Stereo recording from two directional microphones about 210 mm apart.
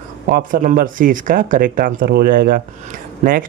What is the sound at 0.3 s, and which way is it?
Speech, 45° right (ahead or behind).